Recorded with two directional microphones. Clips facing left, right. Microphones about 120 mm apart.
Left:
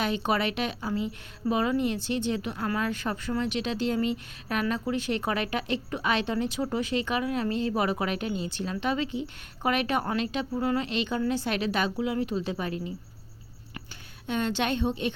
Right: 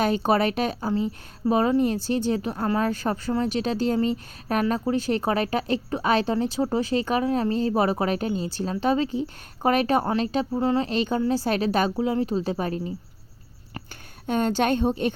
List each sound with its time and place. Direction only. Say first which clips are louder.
0.0 s speech: right 6 dB; 40° right (ahead or behind)
14.3 s a woman's voice: right 5 dB; 45° right (ahead or behind)